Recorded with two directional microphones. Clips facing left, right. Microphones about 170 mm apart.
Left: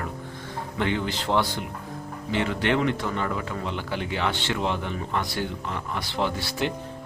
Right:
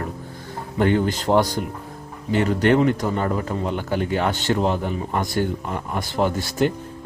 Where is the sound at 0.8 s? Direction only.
45° right (ahead or behind).